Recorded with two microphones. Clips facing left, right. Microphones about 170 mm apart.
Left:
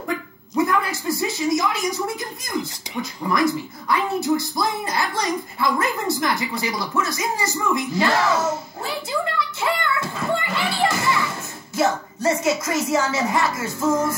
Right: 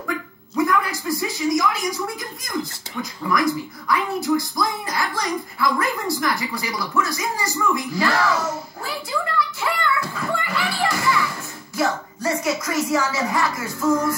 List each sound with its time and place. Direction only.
0.7 s a woman's voice: 25° left (ahead or behind)
8.8 s a sound: 25° left (ahead or behind)
11.7 s a woman's voice: 25° left (ahead or behind)